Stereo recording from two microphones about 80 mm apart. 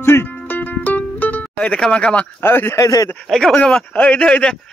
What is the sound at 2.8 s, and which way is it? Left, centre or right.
Speech, left.